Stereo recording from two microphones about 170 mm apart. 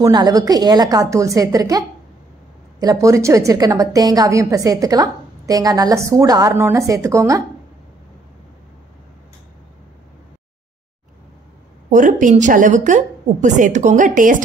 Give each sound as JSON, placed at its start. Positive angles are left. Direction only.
{"t": 0.0, "sound": "a woman's voice", "side_deg": -20}
{"t": 11.9, "sound": "a woman's voice", "side_deg": -50}